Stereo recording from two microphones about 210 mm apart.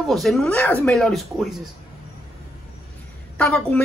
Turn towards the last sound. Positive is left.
turn(degrees=5)  # may be behind; listen again after turning